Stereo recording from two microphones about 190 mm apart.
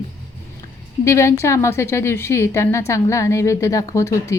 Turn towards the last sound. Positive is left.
turn(degrees=15)  # may be behind; listen again after turning